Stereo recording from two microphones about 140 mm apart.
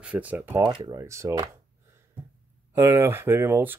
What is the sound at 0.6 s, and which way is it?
Speech, 30° right (ahead or behind).